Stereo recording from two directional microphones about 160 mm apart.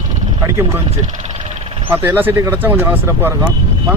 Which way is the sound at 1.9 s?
15° right (ahead or behind).